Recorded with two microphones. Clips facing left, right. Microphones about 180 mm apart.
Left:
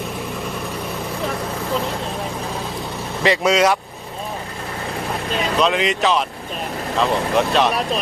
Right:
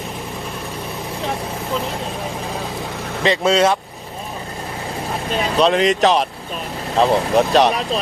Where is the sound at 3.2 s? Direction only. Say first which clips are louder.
Right 1 dB; 25° right (ahead or behind).